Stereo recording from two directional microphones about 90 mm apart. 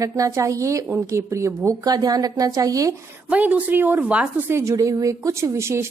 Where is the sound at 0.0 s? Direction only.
35° right (ahead or behind).